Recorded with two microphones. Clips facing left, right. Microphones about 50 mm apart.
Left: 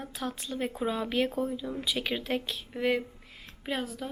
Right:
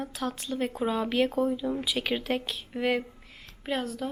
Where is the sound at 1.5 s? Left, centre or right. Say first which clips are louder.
Right 5 dB; centre.